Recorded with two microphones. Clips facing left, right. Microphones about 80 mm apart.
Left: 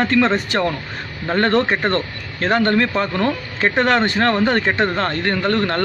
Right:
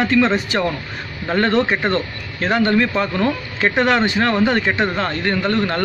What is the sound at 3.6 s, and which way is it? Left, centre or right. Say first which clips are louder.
Speech: even; left.